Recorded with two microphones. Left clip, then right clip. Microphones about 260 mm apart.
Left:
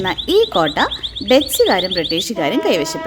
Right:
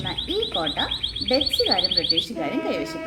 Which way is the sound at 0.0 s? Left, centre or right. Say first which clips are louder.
Left 11 dB; left.